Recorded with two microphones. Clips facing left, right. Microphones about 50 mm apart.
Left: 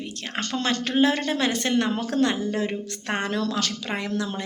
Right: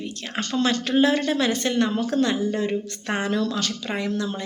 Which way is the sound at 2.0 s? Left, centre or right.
Left.